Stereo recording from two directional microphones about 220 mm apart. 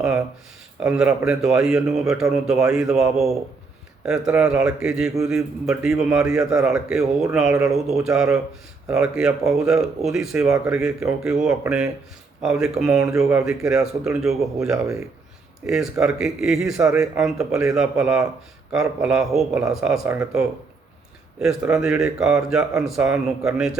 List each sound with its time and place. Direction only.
0.9 s a man's voice: 5° right (ahead or behind)
7.5 s a man's voice: 15° right (ahead or behind)
8.0 s speech: 5° right (ahead or behind)
15.6 s speech: centre (ahead or behind)
16.7 s a man's voice: 15° right (ahead or behind)
17.2 s speech: centre (ahead or behind)
17.5 s a man's voice: 15° right (ahead or behind)
17.7 s speech: 5° right (ahead or behind)
21.4 s speech: 5° right (ahead or behind)